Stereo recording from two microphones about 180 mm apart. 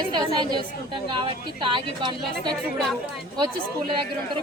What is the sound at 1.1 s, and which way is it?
A woman's voice, 25° right (ahead or behind).